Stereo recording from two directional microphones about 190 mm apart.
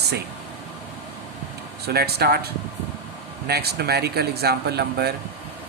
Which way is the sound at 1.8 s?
55° right (ahead or behind).